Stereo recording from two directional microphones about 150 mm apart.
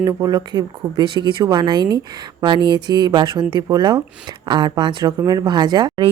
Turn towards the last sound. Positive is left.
turn(degrees=-25)  # may be behind; listen again after turning